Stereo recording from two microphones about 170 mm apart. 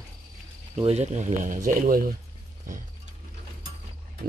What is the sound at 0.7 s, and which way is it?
Speech, 40° right (ahead or behind).